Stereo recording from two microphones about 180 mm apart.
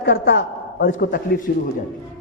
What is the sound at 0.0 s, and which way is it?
Speech, 85° left.